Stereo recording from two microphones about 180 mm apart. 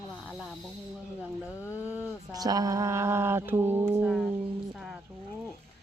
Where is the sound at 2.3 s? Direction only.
20° right (ahead or behind).